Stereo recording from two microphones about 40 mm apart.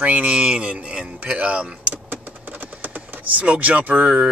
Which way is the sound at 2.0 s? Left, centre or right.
Right.